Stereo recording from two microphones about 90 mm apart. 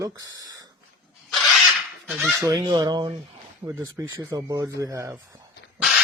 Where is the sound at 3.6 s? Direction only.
35° right (ahead or behind).